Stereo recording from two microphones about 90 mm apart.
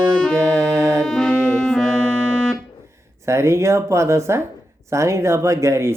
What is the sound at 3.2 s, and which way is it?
Speech, 30° right (ahead or behind).